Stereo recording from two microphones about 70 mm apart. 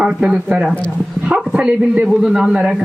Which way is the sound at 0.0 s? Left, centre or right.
Centre.